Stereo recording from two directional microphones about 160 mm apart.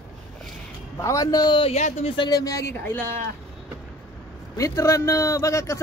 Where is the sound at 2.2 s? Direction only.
25° left (ahead or behind).